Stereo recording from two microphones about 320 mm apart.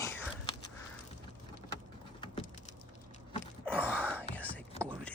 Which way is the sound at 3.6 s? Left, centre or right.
Centre.